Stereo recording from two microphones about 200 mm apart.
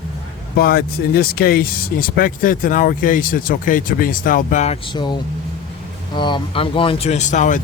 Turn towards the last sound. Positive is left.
turn(degrees=35)  # may be behind; listen again after turning